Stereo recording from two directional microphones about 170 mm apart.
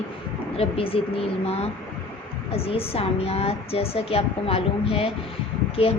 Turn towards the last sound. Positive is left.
turn(degrees=35)  # may be behind; listen again after turning